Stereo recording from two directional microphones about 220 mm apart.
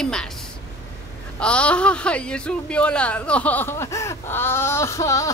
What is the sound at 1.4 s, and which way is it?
A man's voice, 5° left (ahead or behind).